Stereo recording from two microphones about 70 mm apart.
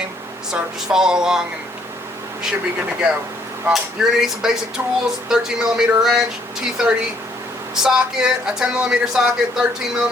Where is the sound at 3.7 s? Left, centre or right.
Centre.